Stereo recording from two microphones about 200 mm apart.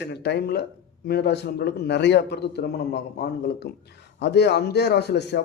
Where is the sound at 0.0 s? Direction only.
60° left (ahead or behind).